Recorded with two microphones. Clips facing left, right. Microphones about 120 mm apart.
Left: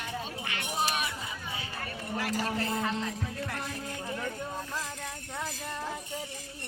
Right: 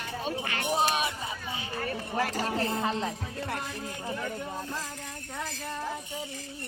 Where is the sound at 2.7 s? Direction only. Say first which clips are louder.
Right 2 dB; 25° right (ahead or behind).